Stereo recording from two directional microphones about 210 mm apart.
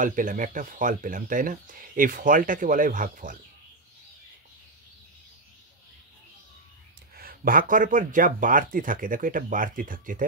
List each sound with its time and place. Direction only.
0.0 s speech: 40° right (ahead or behind)
7.2 s speech: 45° right (ahead or behind)